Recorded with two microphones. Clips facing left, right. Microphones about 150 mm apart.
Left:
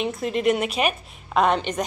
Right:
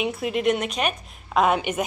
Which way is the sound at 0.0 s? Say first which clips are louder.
Left 1 dB; 5° right (ahead or behind).